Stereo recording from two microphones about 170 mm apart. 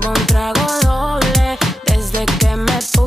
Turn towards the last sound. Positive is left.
turn(degrees=0)  # may be behind; listen again after turning